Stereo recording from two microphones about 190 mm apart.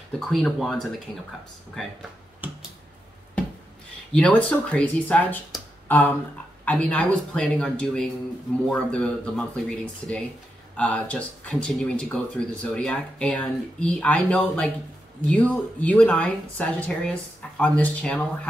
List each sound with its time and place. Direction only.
0.2 s speech: centre (ahead or behind)
1.8 s a sound: centre (ahead or behind)
4.1 s speech: 5° left (ahead or behind)